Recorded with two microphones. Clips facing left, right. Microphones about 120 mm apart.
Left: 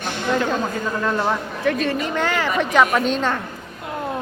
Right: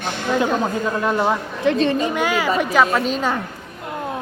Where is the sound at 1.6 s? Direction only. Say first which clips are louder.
Right 4 dB; 25° right (ahead or behind); by 3.3 s 5° right (ahead or behind).